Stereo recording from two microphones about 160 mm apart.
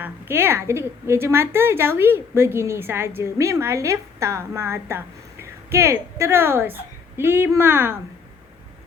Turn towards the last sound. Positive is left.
turn(degrees=-15)  # may be behind; listen again after turning